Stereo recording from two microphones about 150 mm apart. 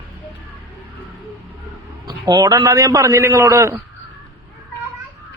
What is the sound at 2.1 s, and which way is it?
A man's voice, 25° right (ahead or behind).